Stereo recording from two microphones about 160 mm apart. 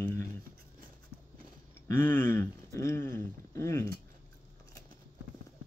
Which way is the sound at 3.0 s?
60° right (ahead or behind).